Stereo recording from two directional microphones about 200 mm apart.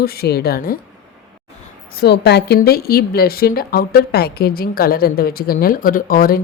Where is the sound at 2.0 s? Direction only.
55° left (ahead or behind).